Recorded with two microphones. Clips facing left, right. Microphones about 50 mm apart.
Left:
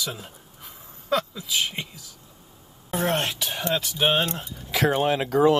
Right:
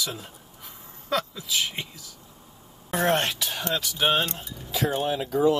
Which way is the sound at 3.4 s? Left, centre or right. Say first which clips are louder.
Left 2 dB; left.